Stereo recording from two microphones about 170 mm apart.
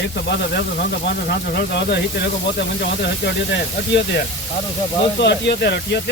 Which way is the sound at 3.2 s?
80° left.